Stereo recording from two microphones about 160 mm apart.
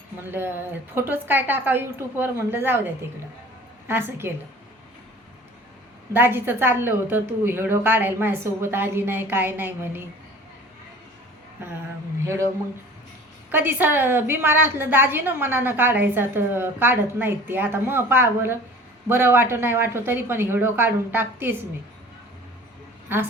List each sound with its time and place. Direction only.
0.3 s a woman's voice: 15° right (ahead or behind)
6.1 s a woman's voice: 15° right (ahead or behind)
11.6 s a woman's voice: 15° right (ahead or behind)
13.5 s a woman's voice: 10° right (ahead or behind)